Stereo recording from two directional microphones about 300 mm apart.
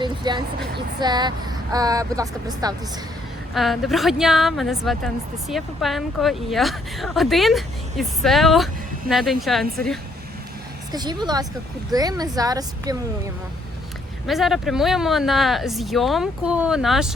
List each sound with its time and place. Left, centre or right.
0.0 s speech: centre
3.5 s a woman's voice: centre
10.9 s speech: centre
14.3 s a woman's voice: centre